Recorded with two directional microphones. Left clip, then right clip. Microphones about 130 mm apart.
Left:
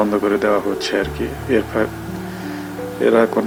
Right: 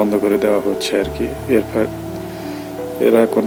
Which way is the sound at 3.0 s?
20° right (ahead or behind).